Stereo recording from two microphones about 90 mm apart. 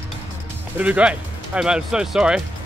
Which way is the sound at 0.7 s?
15° right (ahead or behind).